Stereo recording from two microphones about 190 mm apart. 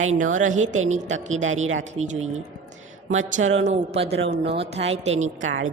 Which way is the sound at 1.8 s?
35° right (ahead or behind).